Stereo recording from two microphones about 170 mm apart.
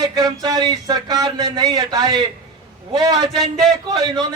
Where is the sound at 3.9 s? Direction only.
25° right (ahead or behind).